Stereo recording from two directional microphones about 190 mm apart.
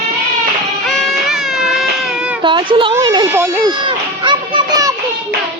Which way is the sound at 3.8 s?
25° right (ahead or behind).